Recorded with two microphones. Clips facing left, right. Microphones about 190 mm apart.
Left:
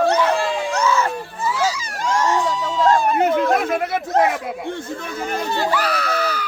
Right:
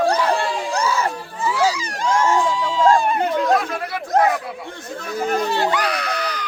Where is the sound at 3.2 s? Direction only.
25° left (ahead or behind).